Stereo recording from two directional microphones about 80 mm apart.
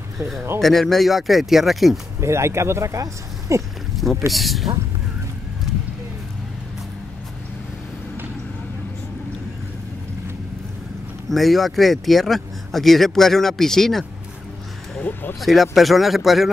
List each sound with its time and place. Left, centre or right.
0.6 s speech: centre
2.1 s speech: right
3.9 s a sound: centre
4.3 s speech: centre
11.2 s speech: centre
15.0 s speech: left
15.4 s speech: centre